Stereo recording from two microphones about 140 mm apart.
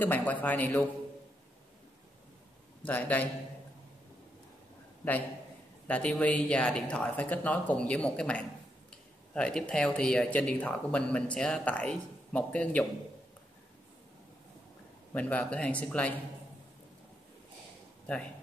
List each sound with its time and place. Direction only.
0.0 s speech: 10° left (ahead or behind)
2.8 s speech: 10° left (ahead or behind)
5.9 s speech: 10° left (ahead or behind)
15.1 s speech: 10° left (ahead or behind)
18.0 s speech: 10° left (ahead or behind)